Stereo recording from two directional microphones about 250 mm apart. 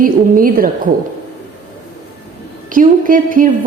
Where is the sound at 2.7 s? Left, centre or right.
Right.